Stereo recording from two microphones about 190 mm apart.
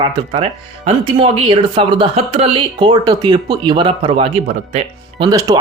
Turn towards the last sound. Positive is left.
turn(degrees=-20)  # may be behind; listen again after turning